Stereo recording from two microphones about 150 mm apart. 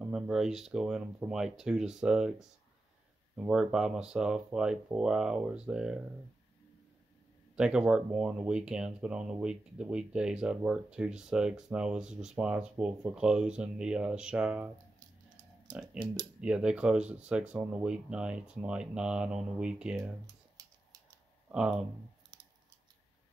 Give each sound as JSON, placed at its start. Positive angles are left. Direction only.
{"t": 0.1, "sound": "speech", "side_deg": -5}
{"t": 3.3, "sound": "speech", "side_deg": -5}
{"t": 7.5, "sound": "speech", "side_deg": -5}
{"t": 15.7, "sound": "speech", "side_deg": -5}
{"t": 20.6, "sound": "typing", "side_deg": -25}
{"t": 21.5, "sound": "speech", "side_deg": -5}